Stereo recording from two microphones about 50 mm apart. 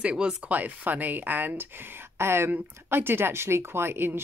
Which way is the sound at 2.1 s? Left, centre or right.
Right.